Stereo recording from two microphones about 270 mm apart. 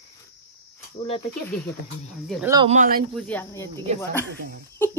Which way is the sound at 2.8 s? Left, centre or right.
Right.